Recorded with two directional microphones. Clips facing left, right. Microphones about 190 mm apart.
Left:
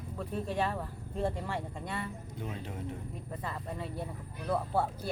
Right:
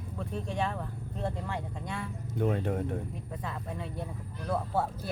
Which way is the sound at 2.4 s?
60° right (ahead or behind).